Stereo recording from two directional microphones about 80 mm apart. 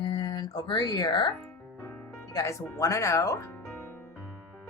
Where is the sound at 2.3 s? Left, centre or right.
Left.